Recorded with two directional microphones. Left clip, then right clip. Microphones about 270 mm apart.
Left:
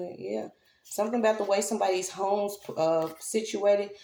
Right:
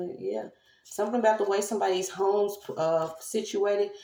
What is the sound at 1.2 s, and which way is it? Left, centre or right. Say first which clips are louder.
Speech: right 2 dB; left.